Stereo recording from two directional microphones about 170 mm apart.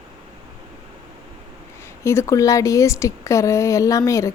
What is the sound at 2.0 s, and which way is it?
A woman's voice, 15° left (ahead or behind).